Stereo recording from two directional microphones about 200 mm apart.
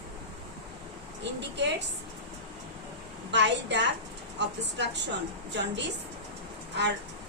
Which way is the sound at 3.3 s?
60° right (ahead or behind).